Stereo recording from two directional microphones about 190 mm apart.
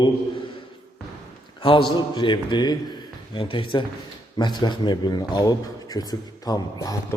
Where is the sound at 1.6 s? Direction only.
25° left (ahead or behind).